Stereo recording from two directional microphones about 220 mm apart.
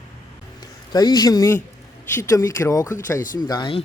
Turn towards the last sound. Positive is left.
turn(degrees=20)  # may be behind; listen again after turning